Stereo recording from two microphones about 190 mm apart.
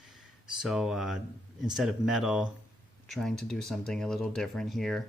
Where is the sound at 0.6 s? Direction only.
Centre (ahead or behind).